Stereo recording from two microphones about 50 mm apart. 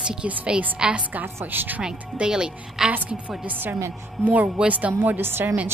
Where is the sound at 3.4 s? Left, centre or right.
Right.